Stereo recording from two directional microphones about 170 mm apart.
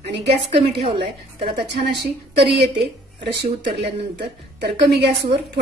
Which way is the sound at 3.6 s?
75° right (ahead or behind).